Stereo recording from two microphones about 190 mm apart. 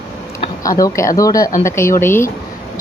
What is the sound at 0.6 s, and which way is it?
Speech, 20° left (ahead or behind).